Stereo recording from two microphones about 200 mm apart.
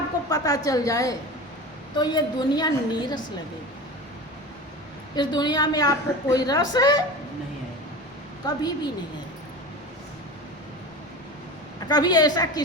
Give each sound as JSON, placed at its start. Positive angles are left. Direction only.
{"t": 0.3, "sound": "a woman's voice", "side_deg": 20}
{"t": 5.1, "sound": "a woman's voice", "side_deg": 20}
{"t": 8.4, "sound": "a woman's voice", "side_deg": 20}
{"t": 11.9, "sound": "a woman's voice", "side_deg": 20}